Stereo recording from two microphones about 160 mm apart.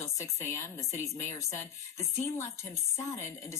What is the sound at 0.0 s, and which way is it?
Speech, 15° left (ahead or behind).